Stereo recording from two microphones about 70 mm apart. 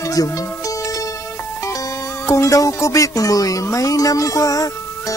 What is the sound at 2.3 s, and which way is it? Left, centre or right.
Speech, left.